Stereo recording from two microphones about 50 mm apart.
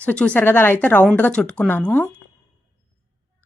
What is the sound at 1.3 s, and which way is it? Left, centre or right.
Speech, centre.